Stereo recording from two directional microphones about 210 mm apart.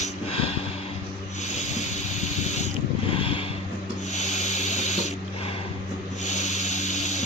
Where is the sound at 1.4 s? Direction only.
35° left (ahead or behind).